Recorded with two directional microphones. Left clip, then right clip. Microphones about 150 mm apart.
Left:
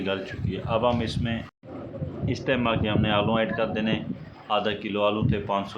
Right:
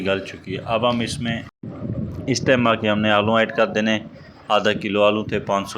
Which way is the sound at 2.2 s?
35° right (ahead or behind).